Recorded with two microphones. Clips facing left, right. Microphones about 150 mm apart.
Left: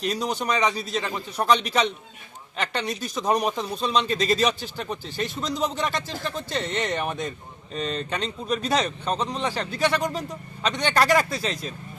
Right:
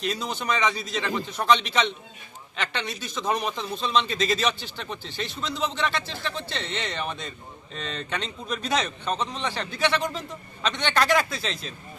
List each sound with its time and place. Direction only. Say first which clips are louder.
0.0 s speech: left 3 dB; 40° left (ahead or behind)